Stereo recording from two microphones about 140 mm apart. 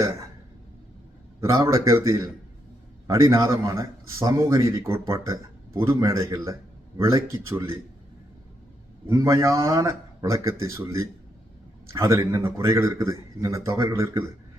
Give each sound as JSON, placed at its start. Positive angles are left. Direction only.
{"t": 1.4, "sound": "a man's voice", "side_deg": -20}
{"t": 9.0, "sound": "a man's voice", "side_deg": -20}